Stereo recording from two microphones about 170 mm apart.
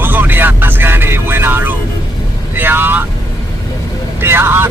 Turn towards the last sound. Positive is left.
turn(degrees=-15)  # may be behind; listen again after turning